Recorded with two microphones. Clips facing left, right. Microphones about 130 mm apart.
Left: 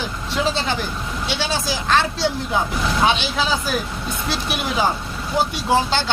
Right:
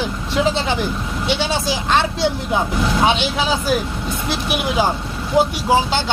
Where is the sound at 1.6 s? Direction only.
20° right (ahead or behind).